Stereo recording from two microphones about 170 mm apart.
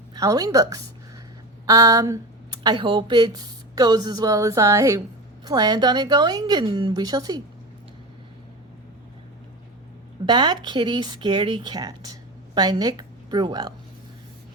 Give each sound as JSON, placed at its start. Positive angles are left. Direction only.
{"t": 0.1, "sound": "speech", "side_deg": -20}
{"t": 10.2, "sound": "a woman's voice", "side_deg": -25}